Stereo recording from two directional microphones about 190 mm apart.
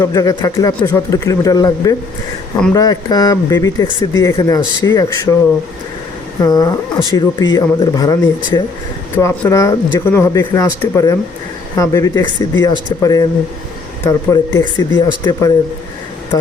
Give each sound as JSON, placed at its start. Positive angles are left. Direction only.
{"t": 0.0, "sound": "speech", "side_deg": 20}
{"t": 6.4, "sound": "speech", "side_deg": 20}